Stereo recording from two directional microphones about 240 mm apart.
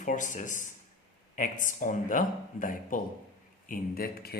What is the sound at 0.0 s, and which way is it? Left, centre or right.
Speech, left.